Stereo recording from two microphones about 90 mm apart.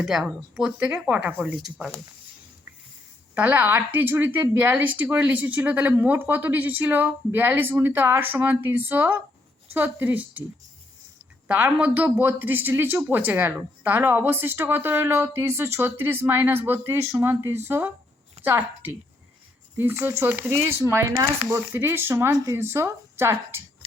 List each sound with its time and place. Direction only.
0.0 s speech: 5° right (ahead or behind)
3.3 s speech: 15° right (ahead or behind)
11.4 s speech: 15° right (ahead or behind)
22.3 s speech: 40° right (ahead or behind)